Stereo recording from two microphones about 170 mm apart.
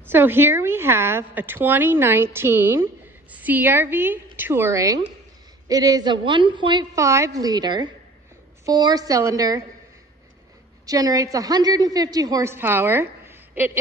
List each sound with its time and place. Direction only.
0.0 s a woman's voice: 10° right (ahead or behind)
10.9 s a woman's voice: 20° right (ahead or behind)